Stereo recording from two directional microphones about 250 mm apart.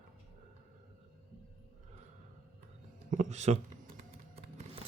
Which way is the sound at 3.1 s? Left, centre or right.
Right.